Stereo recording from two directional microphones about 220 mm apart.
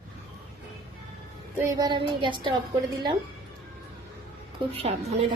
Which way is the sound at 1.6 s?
15° right (ahead or behind).